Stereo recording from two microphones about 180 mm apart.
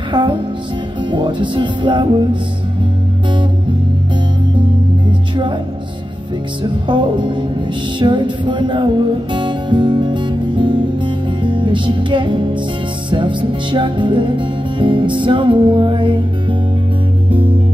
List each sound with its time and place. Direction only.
0.1 s music: 25° right (ahead or behind)
6.9 s music: 25° right (ahead or behind)